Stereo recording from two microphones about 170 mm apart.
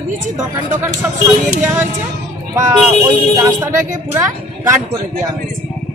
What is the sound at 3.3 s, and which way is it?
A woman's voice, 15° right (ahead or behind).